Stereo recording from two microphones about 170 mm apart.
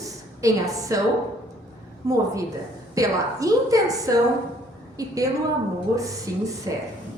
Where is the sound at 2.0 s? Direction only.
20° right (ahead or behind).